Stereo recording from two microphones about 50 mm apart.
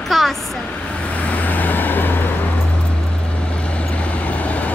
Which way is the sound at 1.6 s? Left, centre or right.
Left.